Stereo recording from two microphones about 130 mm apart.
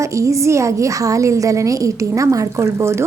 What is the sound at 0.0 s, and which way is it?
A woman's voice, 25° right (ahead or behind).